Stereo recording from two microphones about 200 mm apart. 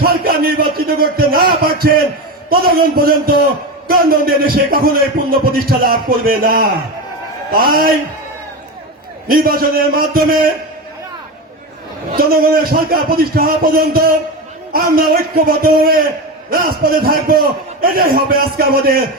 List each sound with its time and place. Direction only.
0.0 s a sound: 50° right (ahead or behind)
2.5 s a man's voice: 50° right (ahead or behind)
9.2 s a man's voice: 45° right (ahead or behind)
12.1 s a man's voice: 50° right (ahead or behind)